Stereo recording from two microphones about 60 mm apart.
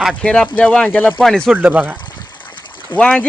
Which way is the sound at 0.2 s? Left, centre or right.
Centre.